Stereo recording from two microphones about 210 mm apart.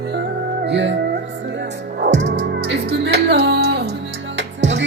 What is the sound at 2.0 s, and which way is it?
Music, 55° right (ahead or behind).